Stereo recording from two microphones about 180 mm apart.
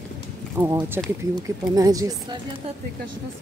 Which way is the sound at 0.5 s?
15° right (ahead or behind).